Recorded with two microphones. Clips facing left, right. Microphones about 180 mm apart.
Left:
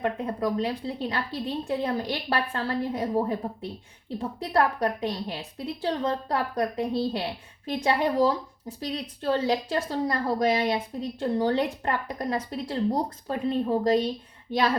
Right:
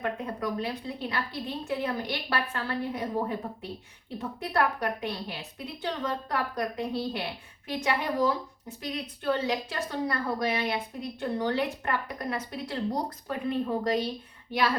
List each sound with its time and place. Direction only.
0.0 s a woman's voice: 35° left (ahead or behind)